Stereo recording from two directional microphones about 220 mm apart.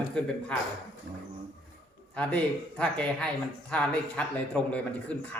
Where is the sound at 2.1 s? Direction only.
5° left (ahead or behind).